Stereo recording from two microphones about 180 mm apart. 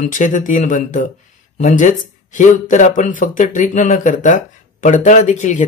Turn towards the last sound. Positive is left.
turn(degrees=45)  # may be behind; listen again after turning